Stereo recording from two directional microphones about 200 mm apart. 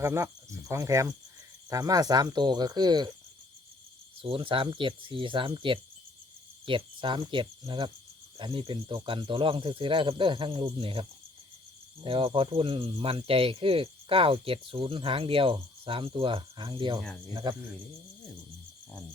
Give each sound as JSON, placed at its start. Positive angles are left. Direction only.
{"t": 0.0, "sound": "speech", "side_deg": -15}
{"t": 4.2, "sound": "speech", "side_deg": -25}
{"t": 12.0, "sound": "speech", "side_deg": -25}